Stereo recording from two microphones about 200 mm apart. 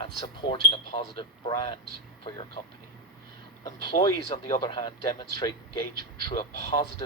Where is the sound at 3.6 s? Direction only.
20° left (ahead or behind).